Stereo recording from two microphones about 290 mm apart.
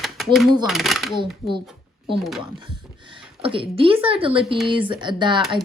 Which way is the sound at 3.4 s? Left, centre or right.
Centre.